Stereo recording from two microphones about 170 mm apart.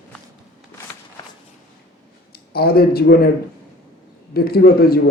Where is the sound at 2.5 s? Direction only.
65° left (ahead or behind).